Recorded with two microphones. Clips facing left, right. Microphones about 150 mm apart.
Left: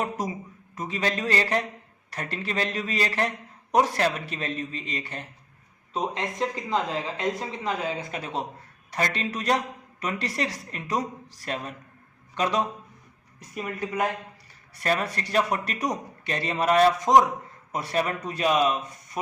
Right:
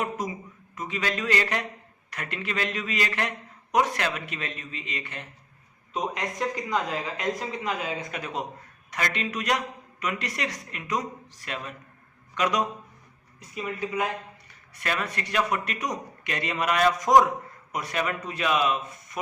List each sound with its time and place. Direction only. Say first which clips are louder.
0.0 s a man's voice: left 1 dB; 35° left (ahead or behind)
13.5 s a woman's voice: even; 45° left (ahead or behind)
14.8 s a man's voice: left 4 dB; 35° left (ahead or behind)